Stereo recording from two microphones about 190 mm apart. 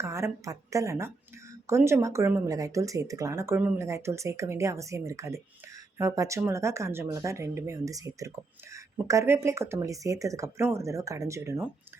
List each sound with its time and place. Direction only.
0.0 s speech: 15° right (ahead or behind)